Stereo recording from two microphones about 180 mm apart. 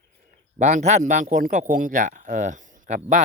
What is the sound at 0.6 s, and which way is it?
Speech, 40° right (ahead or behind).